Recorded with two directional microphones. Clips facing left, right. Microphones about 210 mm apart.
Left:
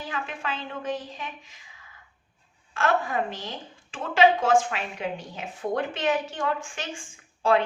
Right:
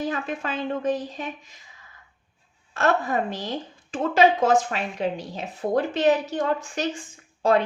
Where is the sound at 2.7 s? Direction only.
40° right (ahead or behind).